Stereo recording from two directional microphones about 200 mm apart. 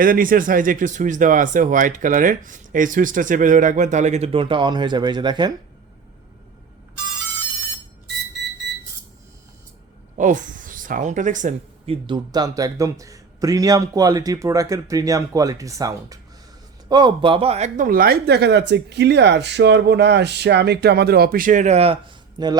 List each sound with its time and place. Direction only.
0.0 s speech: 45° right (ahead or behind); by 5.5 s 20° right (ahead or behind)
10.2 s speech: 40° right (ahead or behind)
12.0 s a man's voice: 20° right (ahead or behind)